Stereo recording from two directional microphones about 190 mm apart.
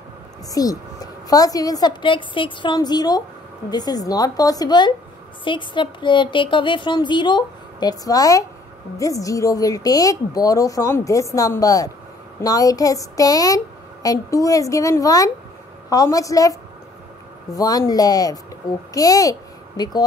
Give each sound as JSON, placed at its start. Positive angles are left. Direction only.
{"t": 0.5, "sound": "a woman's voice", "side_deg": 20}